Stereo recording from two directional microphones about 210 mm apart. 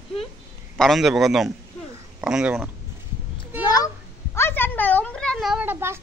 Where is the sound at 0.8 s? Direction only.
Centre (ahead or behind).